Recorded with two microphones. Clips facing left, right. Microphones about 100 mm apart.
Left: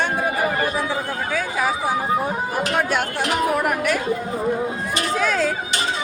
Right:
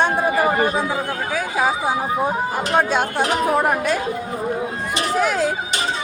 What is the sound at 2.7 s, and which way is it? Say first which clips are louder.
Speech: right 6 dB; 25° right (ahead or behind).